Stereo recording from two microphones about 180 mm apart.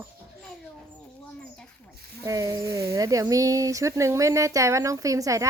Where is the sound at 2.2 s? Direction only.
20° right (ahead or behind).